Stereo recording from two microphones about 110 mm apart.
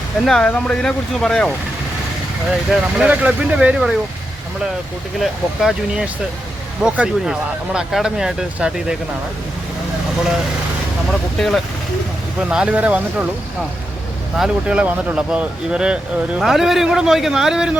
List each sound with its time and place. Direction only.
0.3 s speech: 5° left (ahead or behind)
2.6 s speech: 10° right (ahead or behind)
5.2 s speech: centre (ahead or behind)
11.3 s speech: centre (ahead or behind)
12.4 s speech: 10° right (ahead or behind)
14.3 s speech: 5° right (ahead or behind)